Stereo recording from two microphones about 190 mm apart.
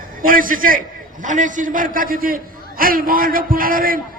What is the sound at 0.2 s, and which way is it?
A man's voice, 45° right (ahead or behind).